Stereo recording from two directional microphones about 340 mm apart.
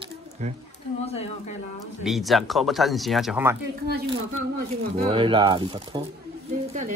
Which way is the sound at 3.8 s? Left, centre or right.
Right.